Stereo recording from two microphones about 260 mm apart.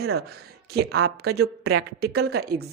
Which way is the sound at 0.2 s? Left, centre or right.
Right.